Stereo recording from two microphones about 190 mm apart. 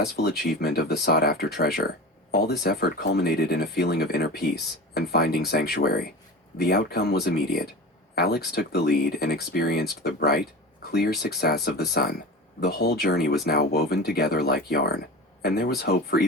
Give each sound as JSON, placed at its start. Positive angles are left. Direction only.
{"t": 0.0, "sound": "speech", "side_deg": 60}